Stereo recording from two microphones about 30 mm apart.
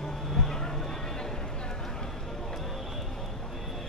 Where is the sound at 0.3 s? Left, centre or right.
Centre.